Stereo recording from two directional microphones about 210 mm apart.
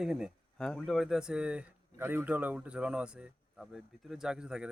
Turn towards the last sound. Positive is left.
turn(degrees=-5)  # may be behind; listen again after turning